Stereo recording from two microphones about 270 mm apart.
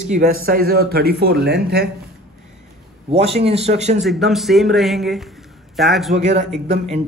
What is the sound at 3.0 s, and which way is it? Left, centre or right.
Speech, right.